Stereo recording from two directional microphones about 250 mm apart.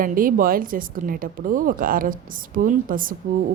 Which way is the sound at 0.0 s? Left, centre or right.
Right.